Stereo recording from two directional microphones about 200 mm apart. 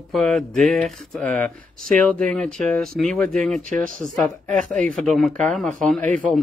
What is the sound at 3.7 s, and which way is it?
Speech, 40° right (ahead or behind).